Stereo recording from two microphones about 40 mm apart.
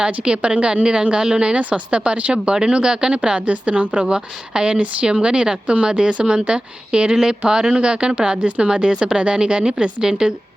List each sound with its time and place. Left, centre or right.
0.0 s a woman's voice: right